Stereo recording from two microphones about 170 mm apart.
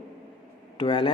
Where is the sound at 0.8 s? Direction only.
30° left (ahead or behind).